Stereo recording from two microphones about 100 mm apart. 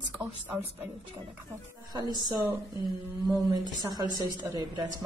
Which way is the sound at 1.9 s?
45° right (ahead or behind).